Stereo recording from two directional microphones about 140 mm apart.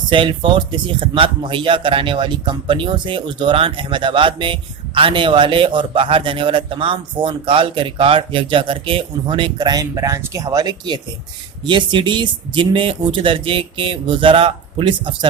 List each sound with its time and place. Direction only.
0.1 s speech: 40° right (ahead or behind)